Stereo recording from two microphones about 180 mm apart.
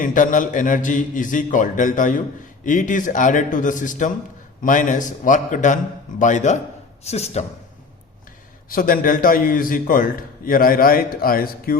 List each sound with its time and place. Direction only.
0.0 s a man's voice: 45° left (ahead or behind)
8.7 s a man's voice: 50° left (ahead or behind)